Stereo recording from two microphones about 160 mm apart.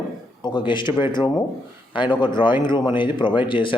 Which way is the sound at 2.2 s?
30° left (ahead or behind).